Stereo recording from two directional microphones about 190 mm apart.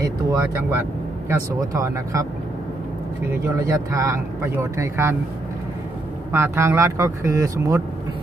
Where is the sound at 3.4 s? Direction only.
15° right (ahead or behind).